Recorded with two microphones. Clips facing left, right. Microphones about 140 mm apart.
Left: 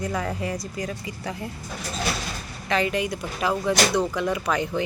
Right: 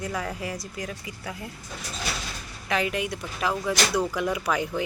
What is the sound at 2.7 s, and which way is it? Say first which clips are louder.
Speech: left 3 dB; 5° right (ahead or behind).